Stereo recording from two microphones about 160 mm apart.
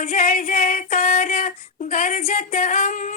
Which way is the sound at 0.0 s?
60° left (ahead or behind).